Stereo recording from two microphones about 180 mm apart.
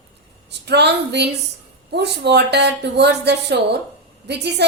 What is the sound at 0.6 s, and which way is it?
A woman's voice, 70° right (ahead or behind).